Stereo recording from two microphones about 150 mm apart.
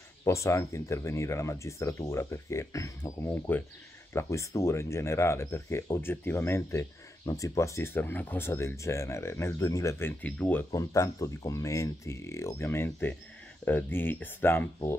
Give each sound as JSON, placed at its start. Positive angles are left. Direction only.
{"t": 0.2, "sound": "speech", "side_deg": 20}